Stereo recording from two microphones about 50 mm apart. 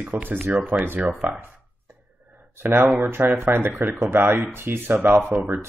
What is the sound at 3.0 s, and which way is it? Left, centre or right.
Speech, right.